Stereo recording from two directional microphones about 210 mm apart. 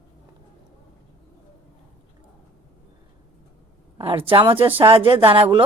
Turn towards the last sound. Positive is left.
turn(degrees=-25)  # may be behind; listen again after turning